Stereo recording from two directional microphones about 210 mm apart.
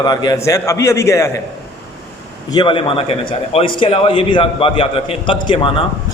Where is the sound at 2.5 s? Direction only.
20° left (ahead or behind).